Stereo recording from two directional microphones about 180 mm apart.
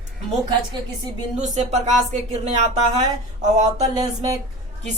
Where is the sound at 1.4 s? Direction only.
40° right (ahead or behind).